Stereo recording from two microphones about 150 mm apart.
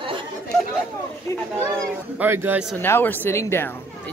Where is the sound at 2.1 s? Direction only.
15° right (ahead or behind).